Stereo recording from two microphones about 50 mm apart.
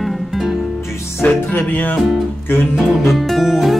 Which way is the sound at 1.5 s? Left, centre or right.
Left.